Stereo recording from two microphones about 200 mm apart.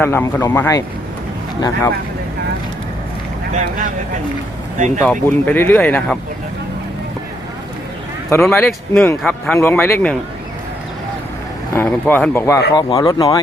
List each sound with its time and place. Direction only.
0.0 s speech: 10° left (ahead or behind)
3.5 s speech: 35° right (ahead or behind)
4.9 s speech: 10° left (ahead or behind)
8.3 s speech: 10° left (ahead or behind)
11.7 s speech: 10° left (ahead or behind)